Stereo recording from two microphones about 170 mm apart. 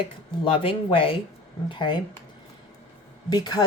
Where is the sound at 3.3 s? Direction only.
25° left (ahead or behind).